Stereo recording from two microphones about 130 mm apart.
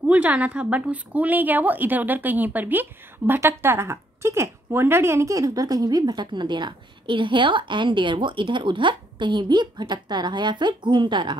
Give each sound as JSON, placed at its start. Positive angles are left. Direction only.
{"t": 0.1, "sound": "a woman's voice", "side_deg": -10}